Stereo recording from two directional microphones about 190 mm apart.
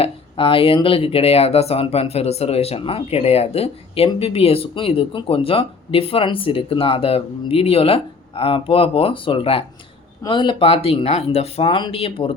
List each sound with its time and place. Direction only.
0.0 s speech: 30° left (ahead or behind)